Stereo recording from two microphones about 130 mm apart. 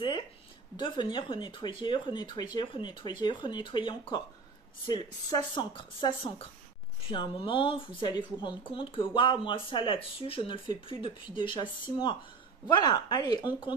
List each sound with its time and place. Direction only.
0.7 s a woman's voice: 35° left (ahead or behind)